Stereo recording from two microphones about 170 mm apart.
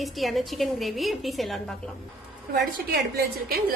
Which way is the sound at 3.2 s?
65° right (ahead or behind).